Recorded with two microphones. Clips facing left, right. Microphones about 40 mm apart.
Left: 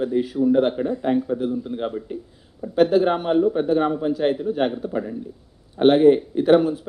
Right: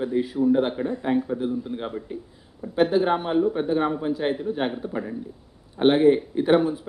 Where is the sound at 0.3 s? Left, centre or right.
Centre.